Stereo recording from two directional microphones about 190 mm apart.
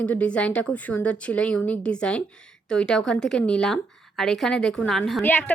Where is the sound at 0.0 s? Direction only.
5° left (ahead or behind).